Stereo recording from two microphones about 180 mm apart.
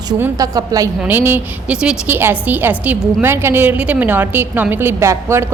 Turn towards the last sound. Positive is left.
turn(degrees=-15)  # may be behind; listen again after turning